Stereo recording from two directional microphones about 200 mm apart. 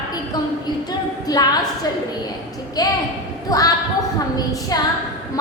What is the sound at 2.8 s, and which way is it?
Speech, 20° left (ahead or behind).